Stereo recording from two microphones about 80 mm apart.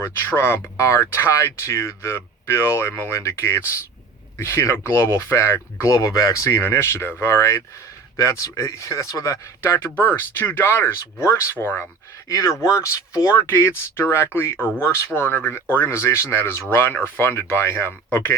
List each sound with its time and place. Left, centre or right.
0.0 s speech: left
9.9 s speech: left
12.3 s speech: left